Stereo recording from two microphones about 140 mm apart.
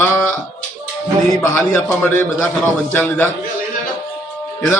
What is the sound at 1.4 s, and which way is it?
A man's voice, 15° left (ahead or behind).